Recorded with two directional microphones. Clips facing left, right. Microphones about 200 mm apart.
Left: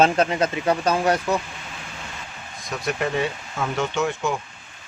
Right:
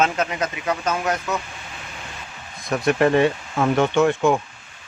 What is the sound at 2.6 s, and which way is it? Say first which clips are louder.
Speech: right 8 dB; 60° right (ahead or behind).